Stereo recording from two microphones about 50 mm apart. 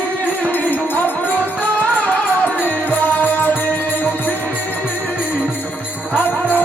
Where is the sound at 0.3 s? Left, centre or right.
Left.